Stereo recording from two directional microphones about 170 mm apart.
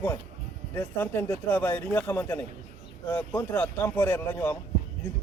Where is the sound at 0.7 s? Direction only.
15° left (ahead or behind).